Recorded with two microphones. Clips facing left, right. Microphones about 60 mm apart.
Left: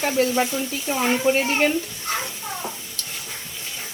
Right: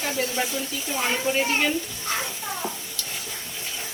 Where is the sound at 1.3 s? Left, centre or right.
Left.